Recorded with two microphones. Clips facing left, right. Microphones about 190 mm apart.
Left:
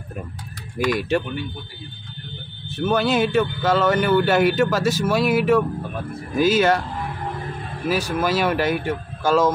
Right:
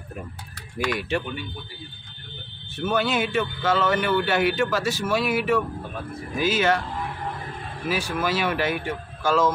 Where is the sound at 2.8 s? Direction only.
40° left (ahead or behind).